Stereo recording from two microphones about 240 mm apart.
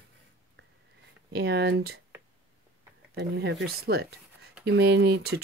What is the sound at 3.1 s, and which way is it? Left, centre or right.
Speech, right.